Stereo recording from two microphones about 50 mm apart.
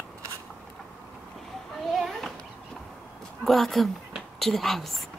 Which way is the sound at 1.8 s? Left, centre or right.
Centre.